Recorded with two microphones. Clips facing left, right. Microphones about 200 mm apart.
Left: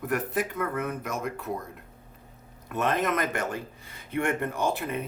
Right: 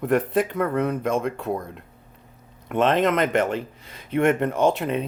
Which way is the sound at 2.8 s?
20° right (ahead or behind).